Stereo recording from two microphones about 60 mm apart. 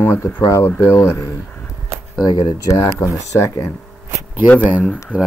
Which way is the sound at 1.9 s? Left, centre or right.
Right.